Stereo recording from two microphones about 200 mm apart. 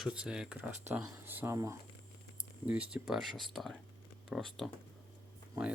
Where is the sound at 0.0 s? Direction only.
5° right (ahead or behind).